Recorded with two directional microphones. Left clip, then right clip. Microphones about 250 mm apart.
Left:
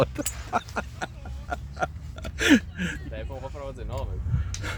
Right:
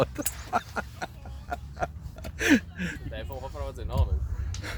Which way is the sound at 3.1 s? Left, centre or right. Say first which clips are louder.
Left 1 dB; right.